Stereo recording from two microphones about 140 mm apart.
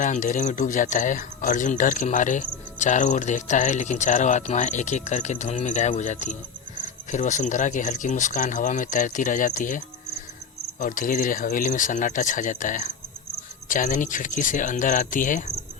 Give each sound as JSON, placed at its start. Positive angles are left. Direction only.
{"t": 0.0, "sound": "speech", "side_deg": 65}